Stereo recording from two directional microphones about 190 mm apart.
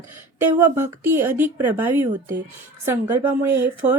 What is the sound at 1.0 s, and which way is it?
A woman's voice, 10° right (ahead or behind).